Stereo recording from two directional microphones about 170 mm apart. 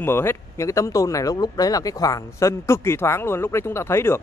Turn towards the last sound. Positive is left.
turn(degrees=15)  # may be behind; listen again after turning